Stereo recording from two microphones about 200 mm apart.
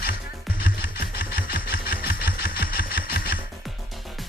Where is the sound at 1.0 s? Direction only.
50° left (ahead or behind).